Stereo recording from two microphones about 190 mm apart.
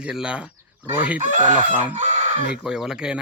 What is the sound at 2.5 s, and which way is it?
Speech, 5° right (ahead or behind).